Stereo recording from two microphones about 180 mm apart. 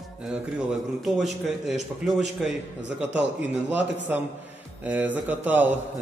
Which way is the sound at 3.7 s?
10° right (ahead or behind).